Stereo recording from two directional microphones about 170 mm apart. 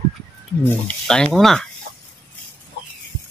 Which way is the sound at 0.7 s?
5° left (ahead or behind).